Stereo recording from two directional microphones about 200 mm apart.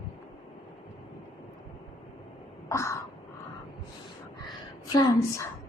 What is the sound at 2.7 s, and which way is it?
Crow, 15° left (ahead or behind).